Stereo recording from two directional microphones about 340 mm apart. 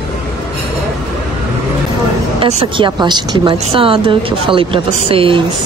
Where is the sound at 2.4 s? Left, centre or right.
Centre.